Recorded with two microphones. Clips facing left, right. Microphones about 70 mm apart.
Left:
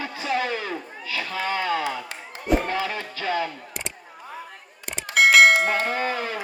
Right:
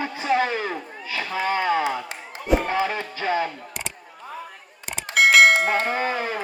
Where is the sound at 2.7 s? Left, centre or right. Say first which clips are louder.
Right 3 dB; right.